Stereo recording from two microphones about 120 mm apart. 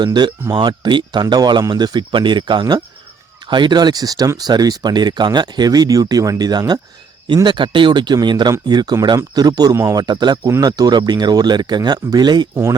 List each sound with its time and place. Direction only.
0.0 s speech: 40° right (ahead or behind)